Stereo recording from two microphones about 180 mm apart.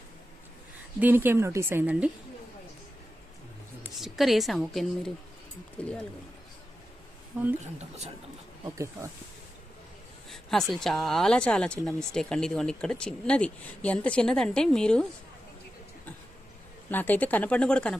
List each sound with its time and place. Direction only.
0.9 s speech: 10° right (ahead or behind)
3.9 s speech: centre (ahead or behind)
7.3 s speech: 10° right (ahead or behind)
7.8 s speech: 35° right (ahead or behind)
10.2 s speech: centre (ahead or behind)
16.9 s speech: 10° left (ahead or behind)